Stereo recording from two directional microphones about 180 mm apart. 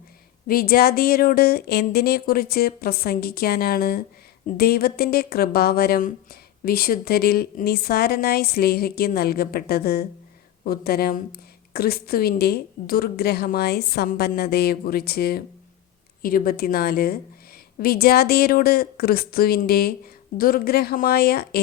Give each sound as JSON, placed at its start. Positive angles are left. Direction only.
{"t": 0.4, "sound": "a woman's voice", "side_deg": 55}